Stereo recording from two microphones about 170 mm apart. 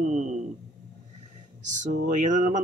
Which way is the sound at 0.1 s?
45° right (ahead or behind).